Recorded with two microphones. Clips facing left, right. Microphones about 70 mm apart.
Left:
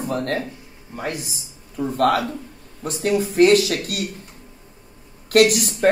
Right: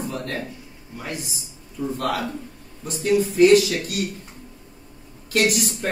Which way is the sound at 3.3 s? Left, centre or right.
Left.